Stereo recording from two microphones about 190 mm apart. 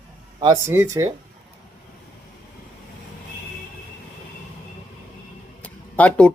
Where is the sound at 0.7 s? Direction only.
10° right (ahead or behind).